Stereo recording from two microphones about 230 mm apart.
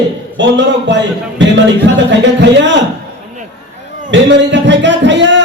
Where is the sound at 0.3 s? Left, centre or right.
Right.